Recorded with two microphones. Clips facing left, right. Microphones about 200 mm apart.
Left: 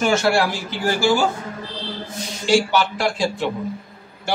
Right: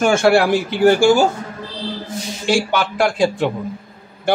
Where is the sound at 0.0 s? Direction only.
55° right (ahead or behind).